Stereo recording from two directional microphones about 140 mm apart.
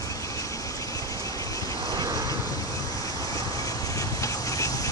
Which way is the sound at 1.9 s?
30° right (ahead or behind).